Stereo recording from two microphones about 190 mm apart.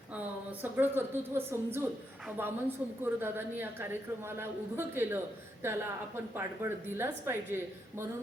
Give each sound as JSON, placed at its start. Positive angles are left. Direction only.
{"t": 0.1, "sound": "a woman's voice", "side_deg": -10}